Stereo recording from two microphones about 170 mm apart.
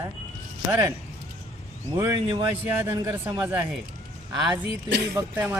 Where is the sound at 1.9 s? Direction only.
20° right (ahead or behind).